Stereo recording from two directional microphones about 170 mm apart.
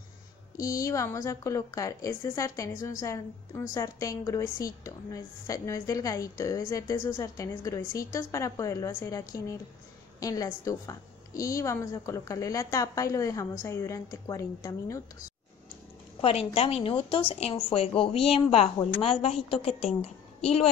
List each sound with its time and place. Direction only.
0.7 s a woman's voice: 20° left (ahead or behind)
10.2 s a woman's voice: 20° left (ahead or behind)
16.2 s a woman's voice: 35° left (ahead or behind)